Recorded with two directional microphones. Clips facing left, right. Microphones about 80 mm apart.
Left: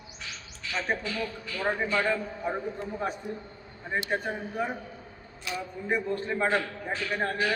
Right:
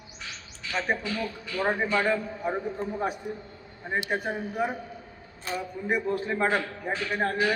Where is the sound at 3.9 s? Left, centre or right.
Centre.